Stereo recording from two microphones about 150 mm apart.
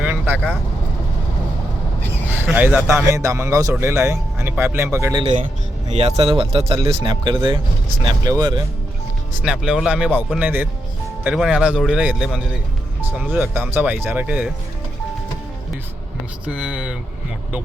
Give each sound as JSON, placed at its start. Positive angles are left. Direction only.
{"t": 0.0, "sound": "vehicle", "side_deg": -10}
{"t": 2.3, "sound": "speech", "side_deg": -15}
{"t": 6.1, "sound": "speech", "side_deg": -40}
{"t": 9.4, "sound": "a man's voice", "side_deg": -5}
{"t": 10.4, "sound": "speech", "side_deg": -15}
{"t": 11.3, "sound": "a man's voice", "side_deg": -5}
{"t": 16.5, "sound": "speech", "side_deg": -5}